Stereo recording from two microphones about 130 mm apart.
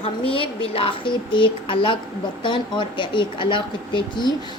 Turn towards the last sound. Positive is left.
turn(degrees=35)  # may be behind; listen again after turning